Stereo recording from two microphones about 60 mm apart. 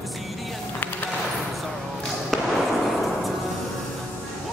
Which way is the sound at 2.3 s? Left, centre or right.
Centre.